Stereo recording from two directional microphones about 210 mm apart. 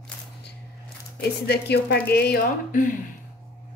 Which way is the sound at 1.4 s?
50° left (ahead or behind).